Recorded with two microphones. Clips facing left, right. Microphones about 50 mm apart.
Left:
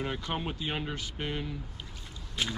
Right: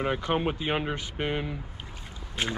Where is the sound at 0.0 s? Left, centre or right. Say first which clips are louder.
Right 7 dB; right.